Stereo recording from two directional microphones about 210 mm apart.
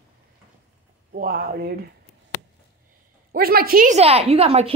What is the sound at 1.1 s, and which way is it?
Speech, 45° right (ahead or behind).